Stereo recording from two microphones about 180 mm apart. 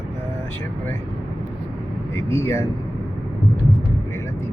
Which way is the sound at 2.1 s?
15° left (ahead or behind).